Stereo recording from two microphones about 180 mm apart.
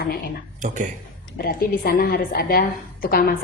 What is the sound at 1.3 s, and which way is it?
A woman's voice, 55° left (ahead or behind).